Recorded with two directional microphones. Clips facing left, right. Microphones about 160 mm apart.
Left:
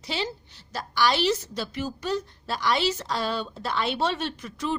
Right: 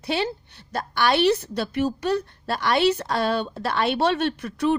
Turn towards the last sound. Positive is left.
turn(degrees=-60)  # may be behind; listen again after turning